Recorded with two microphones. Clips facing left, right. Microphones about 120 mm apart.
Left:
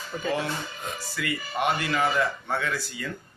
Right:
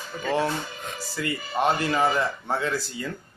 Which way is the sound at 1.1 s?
30° right (ahead or behind).